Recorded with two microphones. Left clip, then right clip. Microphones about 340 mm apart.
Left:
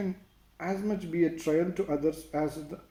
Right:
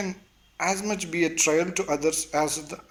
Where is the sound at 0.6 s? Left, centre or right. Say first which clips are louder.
Right 7 dB; right.